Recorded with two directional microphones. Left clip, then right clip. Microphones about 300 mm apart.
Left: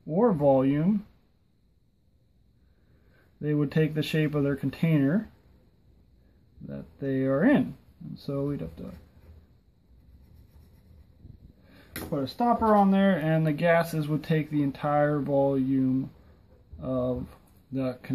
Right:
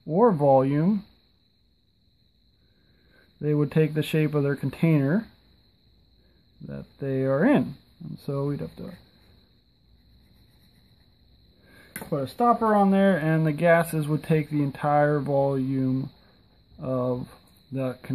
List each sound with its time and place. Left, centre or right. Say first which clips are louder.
0.1 s speech: right 3 dB; centre
3.3 s speech: right 3 dB; centre
6.6 s speech: right 1 dB; centre
11.7 s speech: right 2 dB; right